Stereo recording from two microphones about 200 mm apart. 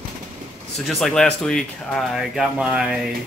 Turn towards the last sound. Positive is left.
turn(degrees=-5)  # may be behind; listen again after turning